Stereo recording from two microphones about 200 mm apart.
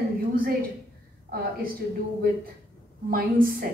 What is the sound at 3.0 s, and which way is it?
Speech, 45° right (ahead or behind).